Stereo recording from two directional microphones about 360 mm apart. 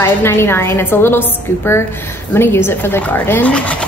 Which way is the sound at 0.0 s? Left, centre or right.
Centre.